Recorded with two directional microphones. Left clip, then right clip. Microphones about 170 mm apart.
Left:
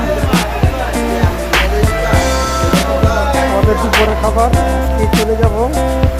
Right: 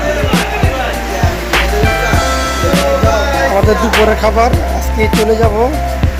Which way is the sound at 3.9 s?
Centre (ahead or behind).